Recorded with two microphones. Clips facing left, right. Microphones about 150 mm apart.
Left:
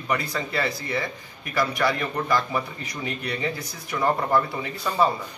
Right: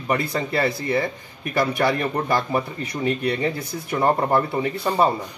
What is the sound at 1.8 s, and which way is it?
Speech, 30° right (ahead or behind).